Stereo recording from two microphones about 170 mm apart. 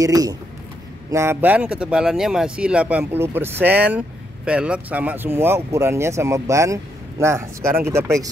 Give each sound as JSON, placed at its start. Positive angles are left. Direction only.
{"t": 0.0, "sound": "speech", "side_deg": -20}